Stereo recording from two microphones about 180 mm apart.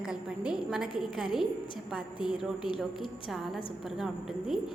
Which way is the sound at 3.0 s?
30° left (ahead or behind).